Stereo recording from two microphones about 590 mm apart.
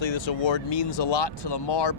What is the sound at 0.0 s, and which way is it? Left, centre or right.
Speech, left.